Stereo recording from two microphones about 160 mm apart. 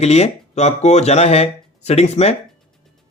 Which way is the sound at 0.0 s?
40° left (ahead or behind).